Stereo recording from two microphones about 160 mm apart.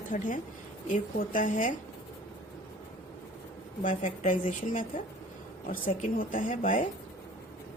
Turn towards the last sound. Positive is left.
turn(degrees=55)  # may be behind; listen again after turning